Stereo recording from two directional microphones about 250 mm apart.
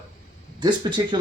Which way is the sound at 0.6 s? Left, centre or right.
Centre.